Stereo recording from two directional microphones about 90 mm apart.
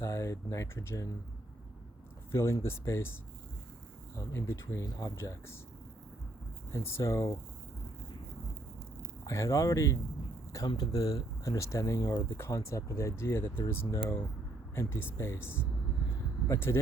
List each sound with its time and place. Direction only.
0.0 s speech: 35° left (ahead or behind)
2.3 s speech: 30° left (ahead or behind)
4.2 s speech: 30° left (ahead or behind)
6.7 s speech: 30° left (ahead or behind)
9.2 s speech: 35° left (ahead or behind)